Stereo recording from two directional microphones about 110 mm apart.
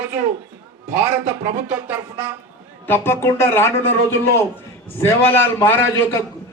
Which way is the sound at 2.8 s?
20° left (ahead or behind).